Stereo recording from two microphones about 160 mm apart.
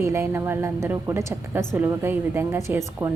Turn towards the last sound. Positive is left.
turn(degrees=-15)  # may be behind; listen again after turning